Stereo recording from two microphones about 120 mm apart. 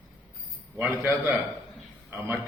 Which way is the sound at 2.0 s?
15° right (ahead or behind).